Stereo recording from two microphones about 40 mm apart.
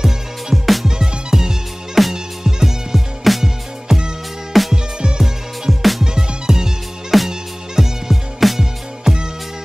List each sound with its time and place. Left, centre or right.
0.5 s music: centre
0.8 s music: centre
2.0 s music: centre
6.1 s music: centre